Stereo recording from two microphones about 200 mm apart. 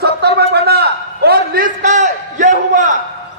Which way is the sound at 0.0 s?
55° right (ahead or behind).